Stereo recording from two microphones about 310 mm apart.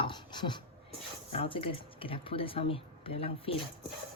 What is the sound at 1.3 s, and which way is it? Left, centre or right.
Speech, centre.